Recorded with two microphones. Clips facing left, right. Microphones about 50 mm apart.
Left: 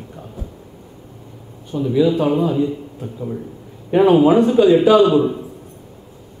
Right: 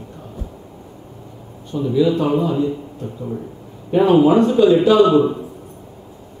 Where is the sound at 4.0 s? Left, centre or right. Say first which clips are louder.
Left 1 dB; centre.